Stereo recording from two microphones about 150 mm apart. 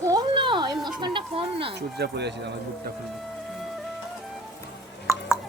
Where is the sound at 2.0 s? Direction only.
90° right.